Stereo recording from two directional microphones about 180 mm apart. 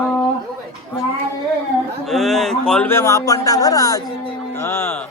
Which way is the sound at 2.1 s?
Centre (ahead or behind).